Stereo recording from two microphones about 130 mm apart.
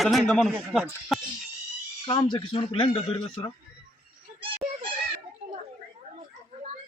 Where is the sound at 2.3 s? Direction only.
40° left (ahead or behind).